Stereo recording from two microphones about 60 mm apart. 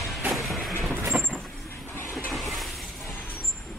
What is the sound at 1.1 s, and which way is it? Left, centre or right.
Vehicle, right.